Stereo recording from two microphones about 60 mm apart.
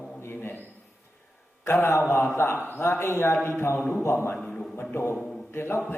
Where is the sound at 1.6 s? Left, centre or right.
Left.